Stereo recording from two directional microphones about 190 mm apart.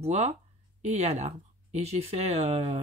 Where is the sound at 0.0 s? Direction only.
35° right (ahead or behind).